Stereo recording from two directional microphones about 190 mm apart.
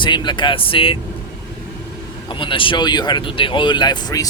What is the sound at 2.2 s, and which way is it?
Speech, 25° left (ahead or behind).